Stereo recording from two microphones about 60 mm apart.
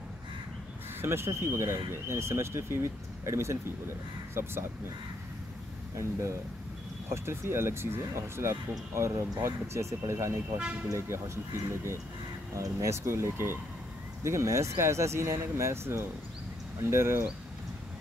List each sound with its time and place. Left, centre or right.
1.0 s speech: right
5.9 s speech: right
7.1 s speech: right